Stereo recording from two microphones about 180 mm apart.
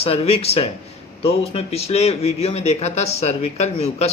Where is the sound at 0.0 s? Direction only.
35° left (ahead or behind).